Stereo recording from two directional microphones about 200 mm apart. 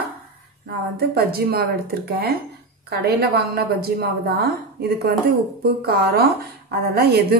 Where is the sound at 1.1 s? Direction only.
50° right (ahead or behind).